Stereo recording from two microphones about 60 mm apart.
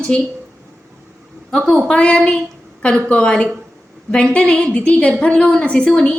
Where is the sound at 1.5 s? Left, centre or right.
Centre.